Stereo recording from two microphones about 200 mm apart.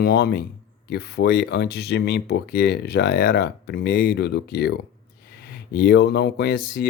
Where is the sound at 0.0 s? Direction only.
50° left (ahead or behind).